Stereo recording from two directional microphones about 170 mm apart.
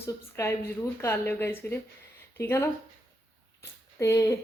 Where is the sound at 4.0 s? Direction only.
15° left (ahead or behind).